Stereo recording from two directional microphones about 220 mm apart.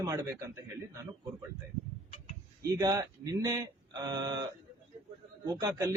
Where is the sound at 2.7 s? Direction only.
15° right (ahead or behind).